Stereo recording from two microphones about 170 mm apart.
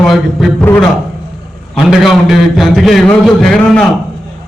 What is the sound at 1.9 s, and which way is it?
A man's voice, centre (ahead or behind).